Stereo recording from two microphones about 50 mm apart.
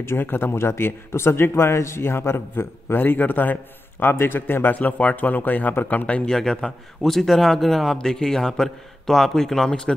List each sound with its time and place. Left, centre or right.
0.2 s a man's voice: left
4.7 s speech: left
6.0 s speech: left
7.0 s a man's voice: centre